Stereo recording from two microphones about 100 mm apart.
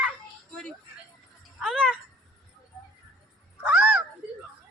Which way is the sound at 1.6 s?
5° right (ahead or behind).